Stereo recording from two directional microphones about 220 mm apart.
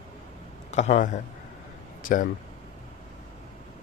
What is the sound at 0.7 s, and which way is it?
Speech, 30° left (ahead or behind).